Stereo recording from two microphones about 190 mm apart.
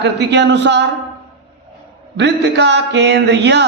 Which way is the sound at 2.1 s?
65° right (ahead or behind).